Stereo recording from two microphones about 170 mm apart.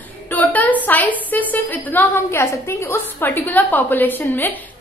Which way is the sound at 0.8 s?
10° left (ahead or behind).